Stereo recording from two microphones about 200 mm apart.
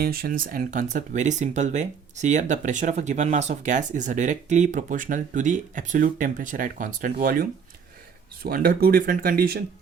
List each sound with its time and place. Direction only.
0.0 s speech: 50° right (ahead or behind)
8.4 s speech: 45° right (ahead or behind)